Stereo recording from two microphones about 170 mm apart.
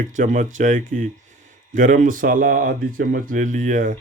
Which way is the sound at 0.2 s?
50° right (ahead or behind).